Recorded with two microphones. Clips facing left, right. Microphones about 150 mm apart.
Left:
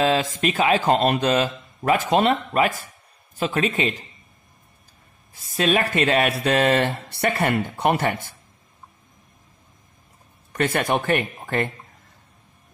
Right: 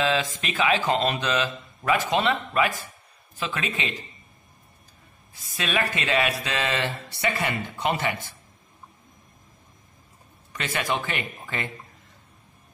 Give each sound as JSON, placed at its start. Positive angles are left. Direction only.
{"t": 0.0, "sound": "a man's voice", "side_deg": 45}
{"t": 5.5, "sound": "speech", "side_deg": 45}
{"t": 10.5, "sound": "speech", "side_deg": 55}